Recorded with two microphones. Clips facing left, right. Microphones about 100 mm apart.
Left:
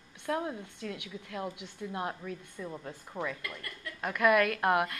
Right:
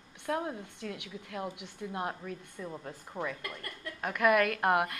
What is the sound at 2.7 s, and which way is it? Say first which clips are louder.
A woman's voice: even; 5° right (ahead or behind).